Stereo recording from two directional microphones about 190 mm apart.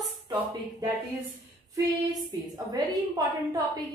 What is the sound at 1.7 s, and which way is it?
Speech, 20° right (ahead or behind).